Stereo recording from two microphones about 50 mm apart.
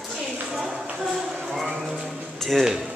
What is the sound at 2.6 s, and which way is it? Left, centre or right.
Speech, centre.